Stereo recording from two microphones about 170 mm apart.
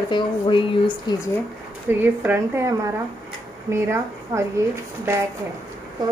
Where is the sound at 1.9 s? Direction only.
10° right (ahead or behind).